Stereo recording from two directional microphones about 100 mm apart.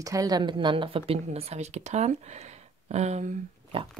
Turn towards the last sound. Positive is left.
turn(degrees=-75)  # may be behind; listen again after turning